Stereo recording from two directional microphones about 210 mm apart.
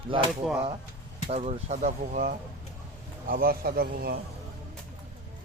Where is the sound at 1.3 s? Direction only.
30° right (ahead or behind).